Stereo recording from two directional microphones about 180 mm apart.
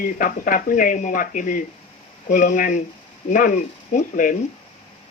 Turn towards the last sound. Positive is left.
turn(degrees=45)  # may be behind; listen again after turning